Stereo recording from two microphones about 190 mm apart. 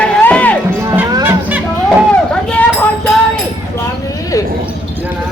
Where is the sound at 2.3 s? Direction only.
5° left (ahead or behind).